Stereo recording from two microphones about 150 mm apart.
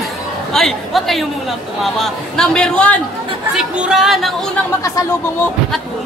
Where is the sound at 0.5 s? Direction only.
5° left (ahead or behind).